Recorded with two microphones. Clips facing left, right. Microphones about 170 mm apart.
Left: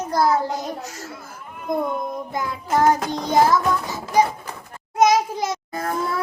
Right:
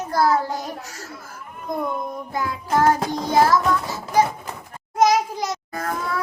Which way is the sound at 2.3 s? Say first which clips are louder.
Right 1 dB; 20° left (ahead or behind).